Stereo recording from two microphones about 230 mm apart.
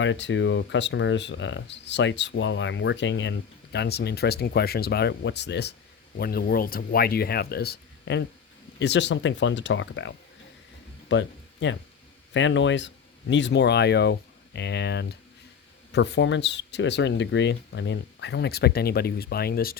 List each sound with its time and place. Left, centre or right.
0.0 s speech: left